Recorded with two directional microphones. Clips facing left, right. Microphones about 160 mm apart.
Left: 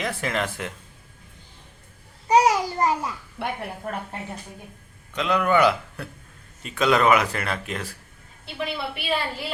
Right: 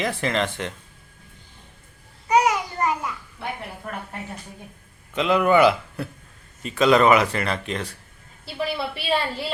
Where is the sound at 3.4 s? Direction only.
65° left (ahead or behind).